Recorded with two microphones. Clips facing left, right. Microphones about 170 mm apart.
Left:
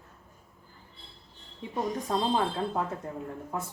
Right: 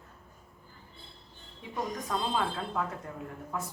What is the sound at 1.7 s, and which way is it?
Speech, 30° left (ahead or behind).